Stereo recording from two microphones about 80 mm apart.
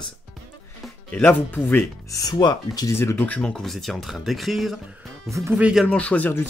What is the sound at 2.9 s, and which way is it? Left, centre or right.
Speech, left.